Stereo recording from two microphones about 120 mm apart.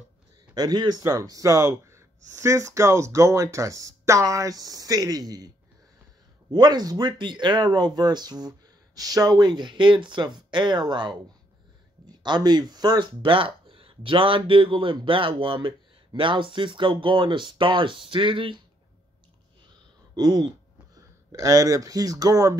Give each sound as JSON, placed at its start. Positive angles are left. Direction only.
{"t": 0.6, "sound": "speech", "side_deg": -35}
{"t": 6.5, "sound": "speech", "side_deg": -35}
{"t": 20.2, "sound": "speech", "side_deg": -35}